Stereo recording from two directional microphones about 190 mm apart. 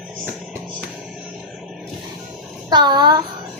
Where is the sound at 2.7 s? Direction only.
20° right (ahead or behind).